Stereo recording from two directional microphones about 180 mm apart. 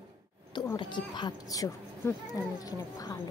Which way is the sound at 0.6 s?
25° left (ahead or behind).